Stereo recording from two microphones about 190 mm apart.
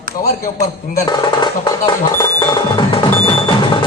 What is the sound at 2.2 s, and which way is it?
Music, 20° left (ahead or behind).